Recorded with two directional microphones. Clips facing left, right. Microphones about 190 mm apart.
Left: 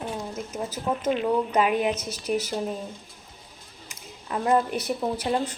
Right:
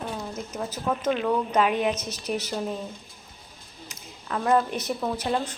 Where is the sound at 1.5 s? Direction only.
10° left (ahead or behind).